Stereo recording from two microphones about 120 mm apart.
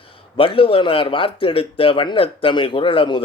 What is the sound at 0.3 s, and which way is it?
Speech, 45° left (ahead or behind).